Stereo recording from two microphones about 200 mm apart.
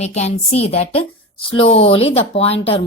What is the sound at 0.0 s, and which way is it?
A woman's voice, 35° left (ahead or behind).